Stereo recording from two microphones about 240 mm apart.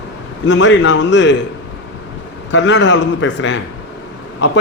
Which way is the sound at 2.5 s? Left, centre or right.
Left.